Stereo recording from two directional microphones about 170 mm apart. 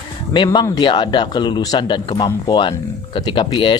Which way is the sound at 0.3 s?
25° left (ahead or behind).